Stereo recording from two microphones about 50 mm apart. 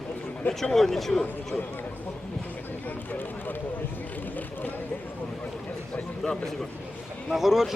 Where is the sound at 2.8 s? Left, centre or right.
Left.